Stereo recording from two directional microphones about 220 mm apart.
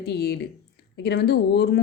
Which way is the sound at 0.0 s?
50° left (ahead or behind).